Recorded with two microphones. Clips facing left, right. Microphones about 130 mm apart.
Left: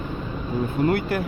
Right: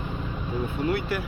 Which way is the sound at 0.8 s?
50° left (ahead or behind).